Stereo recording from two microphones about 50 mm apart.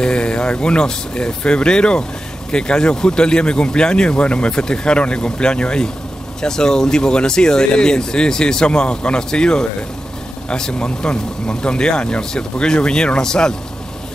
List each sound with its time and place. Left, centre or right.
0.0 s speech: centre